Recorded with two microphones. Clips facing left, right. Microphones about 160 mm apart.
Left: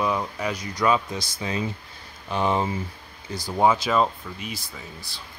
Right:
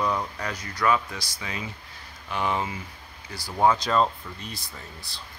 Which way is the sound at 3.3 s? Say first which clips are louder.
Left 2 dB; 20° left (ahead or behind).